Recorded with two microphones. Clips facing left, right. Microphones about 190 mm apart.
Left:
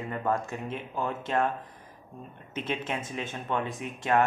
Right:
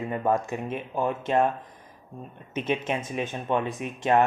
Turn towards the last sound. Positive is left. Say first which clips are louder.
# right 4 dB
turn(degrees=-20)  # may be behind; listen again after turning